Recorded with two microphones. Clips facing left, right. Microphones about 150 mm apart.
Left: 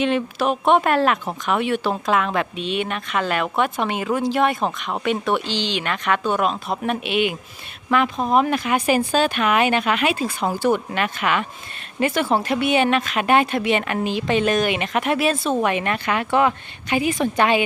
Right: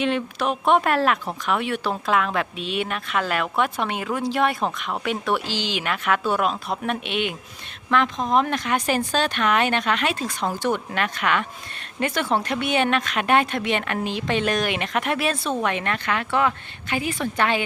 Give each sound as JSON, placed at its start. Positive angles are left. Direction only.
{"t": 0.0, "sound": "speech", "side_deg": 0}